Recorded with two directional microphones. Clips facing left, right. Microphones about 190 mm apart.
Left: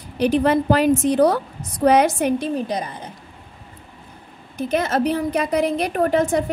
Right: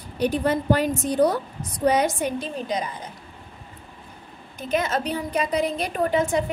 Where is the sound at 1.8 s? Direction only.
75° left (ahead or behind).